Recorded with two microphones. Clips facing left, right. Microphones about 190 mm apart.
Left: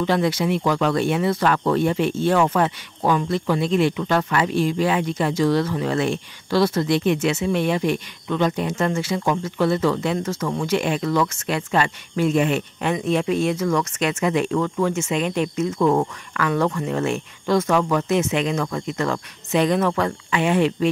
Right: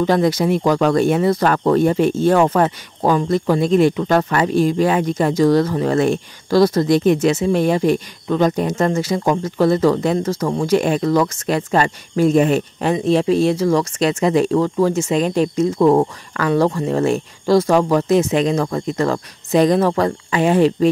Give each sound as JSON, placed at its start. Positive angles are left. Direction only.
{"t": 0.0, "sound": "speech", "side_deg": -40}